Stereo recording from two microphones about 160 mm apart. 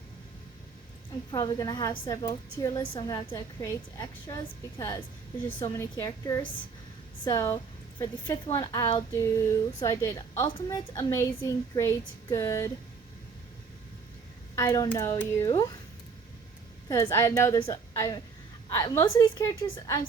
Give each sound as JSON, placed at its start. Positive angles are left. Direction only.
{"t": 1.3, "sound": "a woman's voice", "side_deg": 25}
{"t": 14.5, "sound": "a woman's voice", "side_deg": 20}
{"t": 16.9, "sound": "a woman's voice", "side_deg": 15}